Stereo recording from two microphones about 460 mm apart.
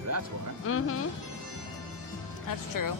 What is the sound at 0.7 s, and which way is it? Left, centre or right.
Speech, left.